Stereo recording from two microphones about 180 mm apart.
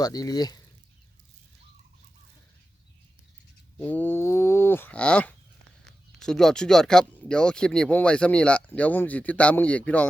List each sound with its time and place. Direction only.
0.0 s speech: 20° left (ahead or behind)
3.8 s speech: 10° left (ahead or behind)